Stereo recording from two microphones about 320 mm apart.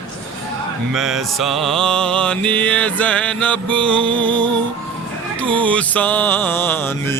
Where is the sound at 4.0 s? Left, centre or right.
Centre.